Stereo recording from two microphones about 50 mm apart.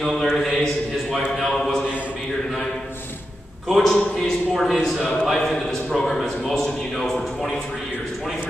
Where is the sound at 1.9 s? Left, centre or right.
Right.